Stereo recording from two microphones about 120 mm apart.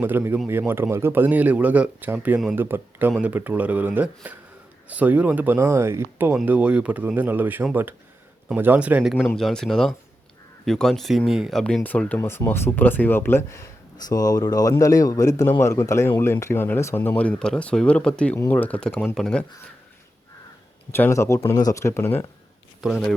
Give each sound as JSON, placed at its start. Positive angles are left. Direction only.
{"t": 0.0, "sound": "a man's voice", "side_deg": -15}
{"t": 9.3, "sound": "speech", "side_deg": 5}
{"t": 11.6, "sound": "speech", "side_deg": 10}
{"t": 13.9, "sound": "speech", "side_deg": 30}
{"t": 20.9, "sound": "speech", "side_deg": 20}
{"t": 22.8, "sound": "speech", "side_deg": 0}